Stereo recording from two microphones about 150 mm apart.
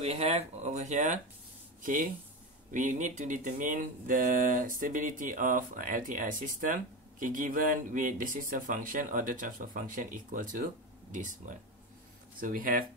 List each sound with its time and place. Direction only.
0.0 s speech: 45° right (ahead or behind); by 12.8 s 70° right (ahead or behind)